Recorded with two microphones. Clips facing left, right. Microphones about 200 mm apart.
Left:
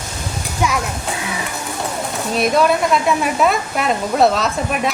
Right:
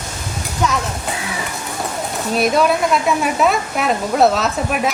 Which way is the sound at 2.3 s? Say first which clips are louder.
Even; centre (ahead or behind).